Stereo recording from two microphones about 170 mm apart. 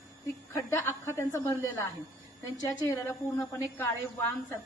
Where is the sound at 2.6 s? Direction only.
15° left (ahead or behind).